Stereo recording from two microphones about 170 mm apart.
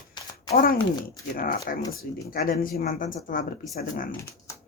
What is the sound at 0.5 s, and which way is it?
A woman's voice, 60° left (ahead or behind).